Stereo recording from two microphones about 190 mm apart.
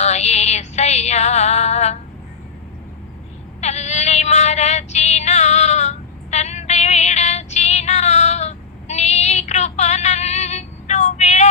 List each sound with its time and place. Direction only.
0.0 s music: 35° left (ahead or behind)
3.6 s cat: 35° left (ahead or behind)